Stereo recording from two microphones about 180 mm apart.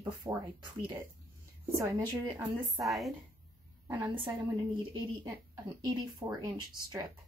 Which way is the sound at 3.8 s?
15° right (ahead or behind).